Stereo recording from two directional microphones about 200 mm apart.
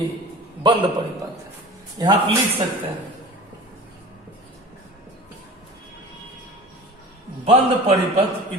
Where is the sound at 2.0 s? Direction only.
20° right (ahead or behind).